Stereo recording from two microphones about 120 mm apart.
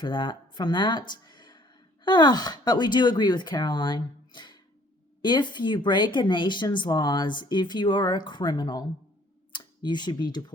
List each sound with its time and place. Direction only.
0.0 s speech: 40° left (ahead or behind)